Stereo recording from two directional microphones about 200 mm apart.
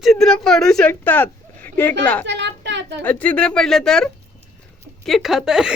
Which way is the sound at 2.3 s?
60° right (ahead or behind).